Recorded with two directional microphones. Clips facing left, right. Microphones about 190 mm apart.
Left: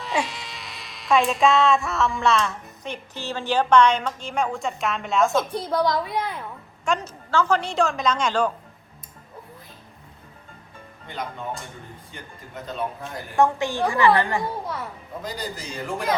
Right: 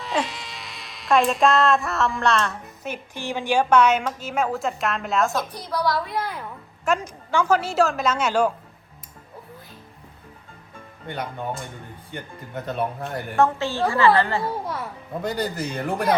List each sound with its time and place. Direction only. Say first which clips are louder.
0.0 s speech: right 1 dB; centre (ahead or behind)
5.5 s a woman's voice: left 2 dB; 25° left (ahead or behind)
6.1 s a woman's voice: left 1 dB; centre (ahead or behind)
12.6 s a man's voice: right 3 dB; 60° right (ahead or behind)
13.3 s a woman's voice: left 1 dB; 15° left (ahead or behind)
15.2 s a man's voice: right 7 dB; 60° right (ahead or behind)